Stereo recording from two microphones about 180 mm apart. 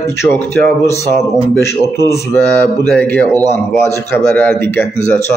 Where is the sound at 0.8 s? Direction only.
15° left (ahead or behind).